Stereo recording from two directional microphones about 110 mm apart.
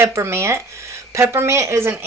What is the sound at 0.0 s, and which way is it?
A woman's voice, 25° right (ahead or behind).